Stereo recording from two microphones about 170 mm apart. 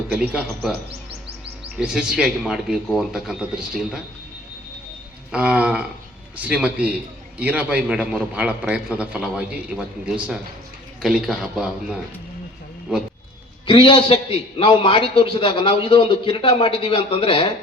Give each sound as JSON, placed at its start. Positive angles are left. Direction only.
{"t": 0.1, "sound": "speech", "side_deg": -5}
{"t": 1.8, "sound": "speech", "side_deg": -5}
{"t": 5.3, "sound": "a man's voice", "side_deg": -5}
{"t": 13.7, "sound": "a man's voice", "side_deg": 30}